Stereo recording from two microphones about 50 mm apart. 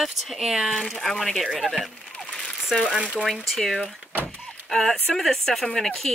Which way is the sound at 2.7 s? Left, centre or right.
Centre.